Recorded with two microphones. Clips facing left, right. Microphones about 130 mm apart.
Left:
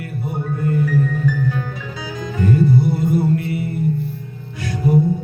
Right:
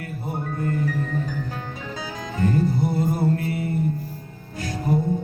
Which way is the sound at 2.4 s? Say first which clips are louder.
Left 5 dB; 40° right (ahead or behind).